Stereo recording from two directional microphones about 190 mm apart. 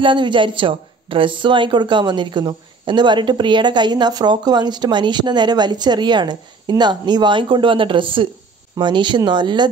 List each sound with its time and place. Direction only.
0.0 s speech: 25° right (ahead or behind)